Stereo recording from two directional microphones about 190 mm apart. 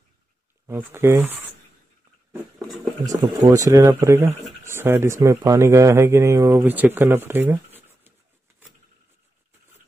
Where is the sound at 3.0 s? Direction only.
20° right (ahead or behind).